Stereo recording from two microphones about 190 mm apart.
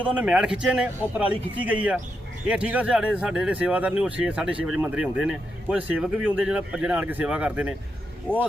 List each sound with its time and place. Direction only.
0.2 s speech: 5° right (ahead or behind)